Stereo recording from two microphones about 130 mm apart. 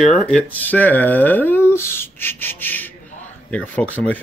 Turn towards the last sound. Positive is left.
turn(degrees=10)  # may be behind; listen again after turning